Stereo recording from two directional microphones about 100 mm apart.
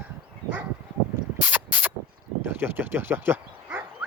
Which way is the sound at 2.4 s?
20° right (ahead or behind).